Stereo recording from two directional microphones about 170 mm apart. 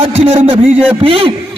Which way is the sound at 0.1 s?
40° right (ahead or behind).